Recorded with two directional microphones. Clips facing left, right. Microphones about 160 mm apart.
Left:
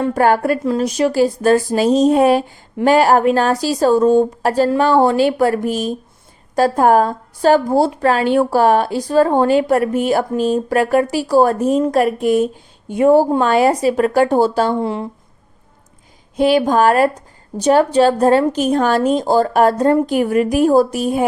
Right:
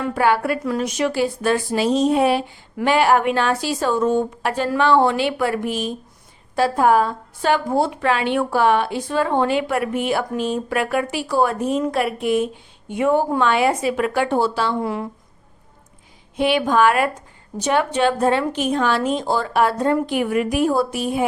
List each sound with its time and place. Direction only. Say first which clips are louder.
0.1 s a woman's voice: left 2 dB; 45° left (ahead or behind)
0.6 s a woman's voice: left 5 dB; 30° left (ahead or behind)
14.8 s speech: left 3 dB; 25° left (ahead or behind)
16.4 s a woman's voice: left 4 dB; 40° left (ahead or behind)